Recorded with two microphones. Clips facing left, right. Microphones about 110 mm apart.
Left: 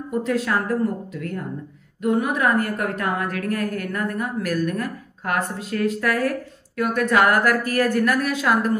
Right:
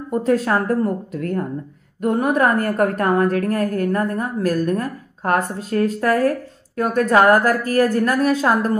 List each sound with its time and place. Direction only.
0.1 s a woman's voice: 40° right (ahead or behind)